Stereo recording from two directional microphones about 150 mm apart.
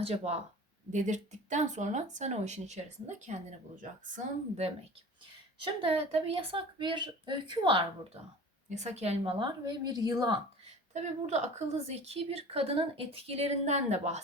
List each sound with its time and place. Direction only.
0.0 s a woman's voice: 45° right (ahead or behind)
0.9 s a woman's voice: 55° right (ahead or behind)
5.6 s a woman's voice: 40° right (ahead or behind)
8.7 s a woman's voice: 50° right (ahead or behind)
9.4 s a woman's voice: 25° right (ahead or behind)
10.9 s a woman's voice: 50° right (ahead or behind)